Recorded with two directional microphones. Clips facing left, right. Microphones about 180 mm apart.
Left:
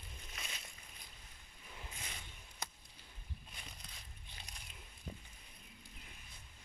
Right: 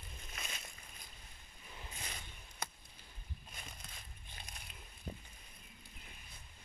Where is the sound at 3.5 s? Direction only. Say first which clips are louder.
Right 2 dB; 50° right (ahead or behind).